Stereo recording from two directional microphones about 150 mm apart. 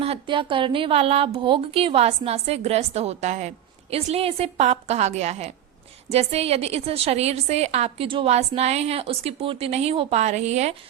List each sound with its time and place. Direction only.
0.0 s a woman's voice: 35° right (ahead or behind)